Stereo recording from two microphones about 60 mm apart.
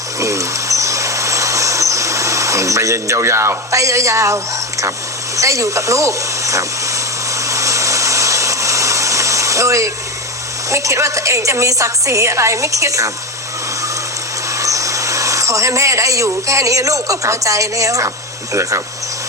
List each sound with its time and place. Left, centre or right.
0.2 s insect: right
5.4 s a sound: right
10.7 s a woman's voice: right
14.6 s speech: right